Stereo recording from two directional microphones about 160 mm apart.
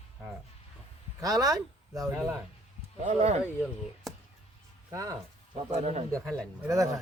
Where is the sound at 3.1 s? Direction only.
45° right (ahead or behind).